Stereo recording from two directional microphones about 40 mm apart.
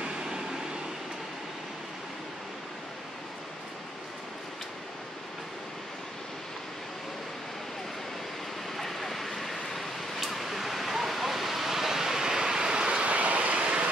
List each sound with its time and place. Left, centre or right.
0.0 s vehicle: centre
8.7 s a sound: centre; by 13.0 s right
13.0 s vehicle: right